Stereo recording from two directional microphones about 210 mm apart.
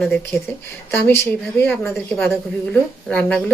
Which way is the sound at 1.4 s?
10° left (ahead or behind).